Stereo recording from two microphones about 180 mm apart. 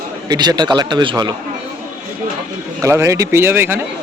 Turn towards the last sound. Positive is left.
turn(degrees=-10)  # may be behind; listen again after turning